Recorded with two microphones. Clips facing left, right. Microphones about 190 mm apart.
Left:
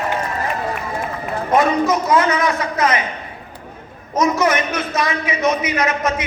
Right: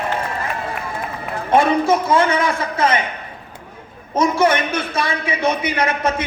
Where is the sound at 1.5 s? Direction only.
30° right (ahead or behind).